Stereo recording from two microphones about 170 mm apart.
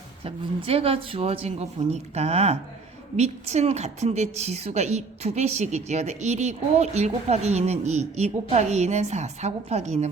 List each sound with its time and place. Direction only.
0.3 s a woman's voice: 35° right (ahead or behind)